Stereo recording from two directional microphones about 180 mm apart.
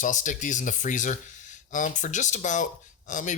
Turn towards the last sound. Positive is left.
turn(degrees=45)  # may be behind; listen again after turning